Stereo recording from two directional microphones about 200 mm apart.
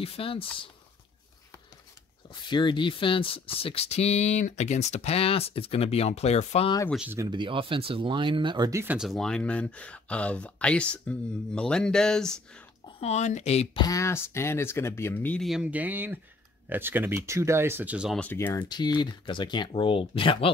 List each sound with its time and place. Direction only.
0.0 s speech: 30° left (ahead or behind)
2.5 s speech: 25° left (ahead or behind)
6.9 s speech: 5° right (ahead or behind)
7.2 s speech: 20° right (ahead or behind); by 12.6 s 5° left (ahead or behind)
13.0 s speech: 35° left (ahead or behind)
13.8 s speech: 15° left (ahead or behind); by 18.2 s 5° right (ahead or behind)
18.2 s speech: 10° left (ahead or behind); by 20.4 s 25° left (ahead or behind)